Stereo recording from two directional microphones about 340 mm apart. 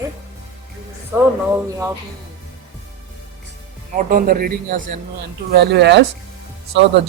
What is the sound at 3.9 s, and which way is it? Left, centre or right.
A man's voice, right.